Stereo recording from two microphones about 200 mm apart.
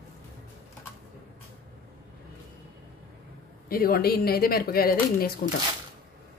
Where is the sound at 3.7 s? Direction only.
50° left (ahead or behind).